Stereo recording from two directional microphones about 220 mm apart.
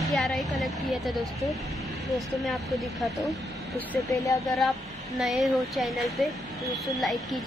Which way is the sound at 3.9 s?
15° left (ahead or behind).